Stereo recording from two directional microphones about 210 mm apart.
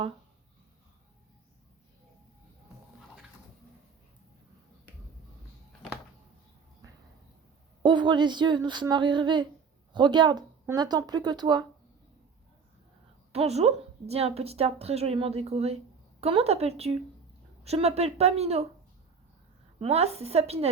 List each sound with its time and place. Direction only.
7.8 s speech: 20° right (ahead or behind)
13.3 s speech: 30° right (ahead or behind)
19.8 s speech: 30° right (ahead or behind)